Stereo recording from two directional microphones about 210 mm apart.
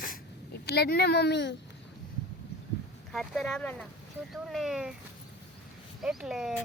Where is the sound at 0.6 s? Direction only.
50° left (ahead or behind).